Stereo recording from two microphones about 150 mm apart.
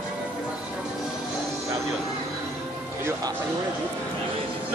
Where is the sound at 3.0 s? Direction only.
25° right (ahead or behind).